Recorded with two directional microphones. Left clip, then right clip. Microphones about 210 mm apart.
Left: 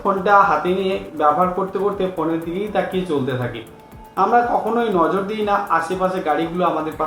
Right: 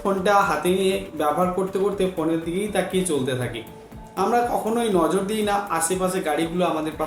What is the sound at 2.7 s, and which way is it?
Speech, 25° right (ahead or behind).